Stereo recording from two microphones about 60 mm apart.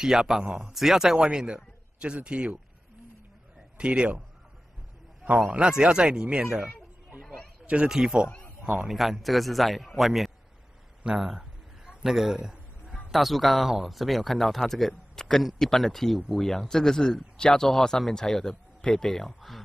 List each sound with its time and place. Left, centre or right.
0.0 s speech: centre
3.7 s a man's voice: centre
5.7 s speech: centre
11.1 s a sound: centre
13.1 s speech: centre